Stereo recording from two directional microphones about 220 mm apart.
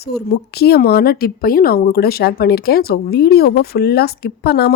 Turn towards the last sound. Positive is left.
turn(degrees=45)  # may be behind; listen again after turning